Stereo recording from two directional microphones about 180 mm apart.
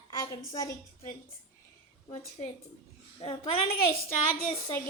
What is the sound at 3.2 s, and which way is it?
Speech, 35° left (ahead or behind).